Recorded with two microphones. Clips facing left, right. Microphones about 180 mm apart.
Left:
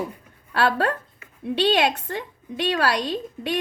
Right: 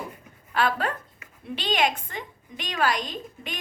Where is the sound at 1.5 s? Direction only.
70° left (ahead or behind).